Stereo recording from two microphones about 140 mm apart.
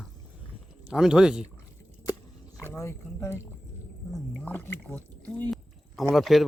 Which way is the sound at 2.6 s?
20° left (ahead or behind).